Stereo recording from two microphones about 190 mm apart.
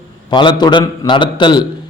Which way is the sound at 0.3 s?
25° left (ahead or behind).